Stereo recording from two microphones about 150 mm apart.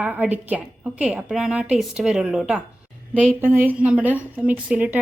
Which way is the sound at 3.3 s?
15° right (ahead or behind).